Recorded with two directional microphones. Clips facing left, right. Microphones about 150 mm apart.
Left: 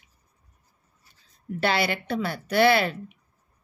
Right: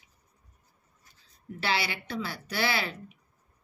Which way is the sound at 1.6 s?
55° left (ahead or behind).